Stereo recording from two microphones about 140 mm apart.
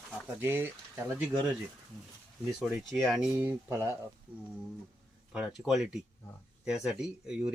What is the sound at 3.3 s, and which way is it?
Speech, 15° right (ahead or behind).